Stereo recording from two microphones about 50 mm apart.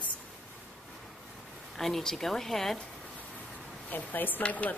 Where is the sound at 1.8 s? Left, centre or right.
Centre.